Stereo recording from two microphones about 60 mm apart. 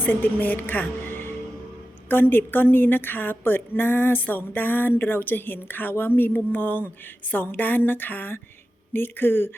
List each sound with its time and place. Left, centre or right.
0.0 s a woman's voice: left